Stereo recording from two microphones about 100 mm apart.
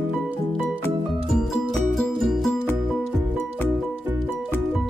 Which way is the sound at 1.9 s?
Centre (ahead or behind).